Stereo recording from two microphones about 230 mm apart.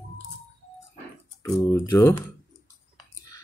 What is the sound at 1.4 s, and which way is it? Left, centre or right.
Speech, centre.